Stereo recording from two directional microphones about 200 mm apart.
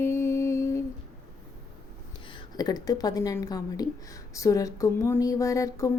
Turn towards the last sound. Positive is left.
turn(degrees=15)  # may be behind; listen again after turning